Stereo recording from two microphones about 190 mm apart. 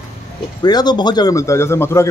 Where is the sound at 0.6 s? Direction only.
20° left (ahead or behind).